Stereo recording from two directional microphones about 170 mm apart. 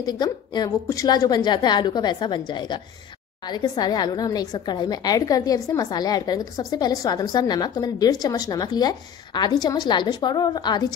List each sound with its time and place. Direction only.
0.0 s a woman's voice: 25° left (ahead or behind)